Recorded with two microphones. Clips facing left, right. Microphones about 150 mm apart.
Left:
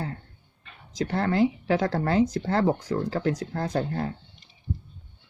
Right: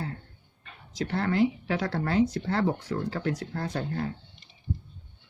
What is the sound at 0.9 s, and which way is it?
Speech, 40° left (ahead or behind).